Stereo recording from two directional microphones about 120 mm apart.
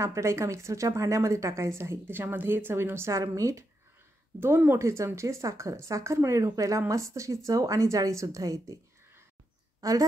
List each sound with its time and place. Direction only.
0.0 s a woman's voice: 25° right (ahead or behind)
9.8 s a woman's voice: 30° right (ahead or behind)